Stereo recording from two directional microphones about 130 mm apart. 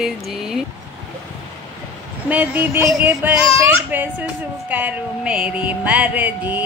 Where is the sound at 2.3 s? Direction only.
15° right (ahead or behind).